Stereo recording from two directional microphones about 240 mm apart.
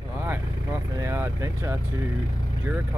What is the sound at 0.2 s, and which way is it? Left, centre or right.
Vehicle, centre.